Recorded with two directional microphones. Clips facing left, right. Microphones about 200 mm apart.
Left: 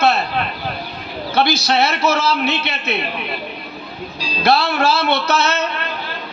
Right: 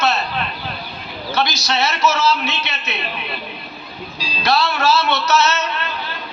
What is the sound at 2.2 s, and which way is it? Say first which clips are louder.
Music: left 1 dB; 55° left (ahead or behind).